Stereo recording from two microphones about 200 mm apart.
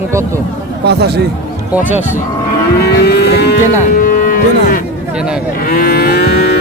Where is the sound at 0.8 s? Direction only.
55° right (ahead or behind).